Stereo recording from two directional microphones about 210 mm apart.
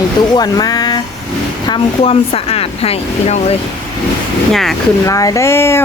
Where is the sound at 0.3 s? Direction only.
20° left (ahead or behind).